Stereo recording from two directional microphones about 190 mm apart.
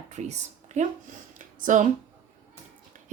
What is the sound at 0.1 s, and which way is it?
A woman's voice, 35° right (ahead or behind).